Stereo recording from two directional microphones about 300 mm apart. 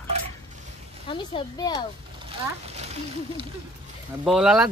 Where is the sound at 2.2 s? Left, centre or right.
Right.